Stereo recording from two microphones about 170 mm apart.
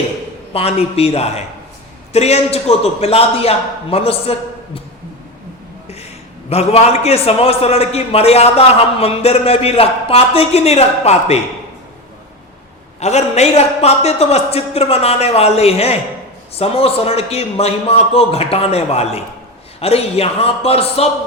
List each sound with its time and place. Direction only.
0.5 s a man's voice: 35° left (ahead or behind)
6.5 s a man's voice: 40° left (ahead or behind)
13.0 s a man's voice: 40° left (ahead or behind)